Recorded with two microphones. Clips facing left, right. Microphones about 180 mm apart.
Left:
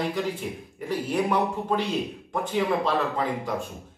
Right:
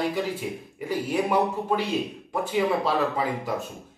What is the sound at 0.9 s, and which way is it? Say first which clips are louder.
Speech: even; 10° right (ahead or behind).